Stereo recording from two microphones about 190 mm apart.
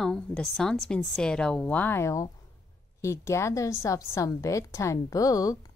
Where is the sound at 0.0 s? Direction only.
5° left (ahead or behind).